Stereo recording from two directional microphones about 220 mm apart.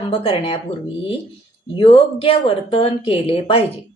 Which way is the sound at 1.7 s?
25° left (ahead or behind).